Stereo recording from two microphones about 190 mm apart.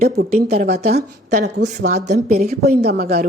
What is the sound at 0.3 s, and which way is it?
A woman's voice, 35° right (ahead or behind).